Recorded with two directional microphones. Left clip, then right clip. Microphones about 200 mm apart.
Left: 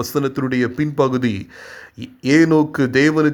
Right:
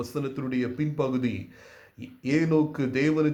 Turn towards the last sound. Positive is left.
turn(degrees=40)  # may be behind; listen again after turning